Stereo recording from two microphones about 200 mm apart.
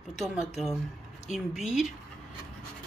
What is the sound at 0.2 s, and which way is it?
Speech, centre (ahead or behind).